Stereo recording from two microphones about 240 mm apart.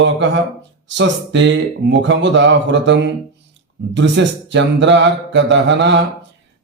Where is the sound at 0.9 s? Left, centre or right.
Right.